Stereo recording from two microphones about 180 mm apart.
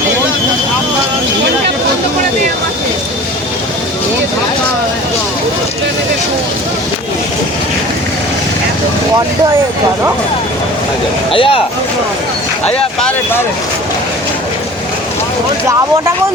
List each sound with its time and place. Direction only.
11.3 s speech: 30° left (ahead or behind)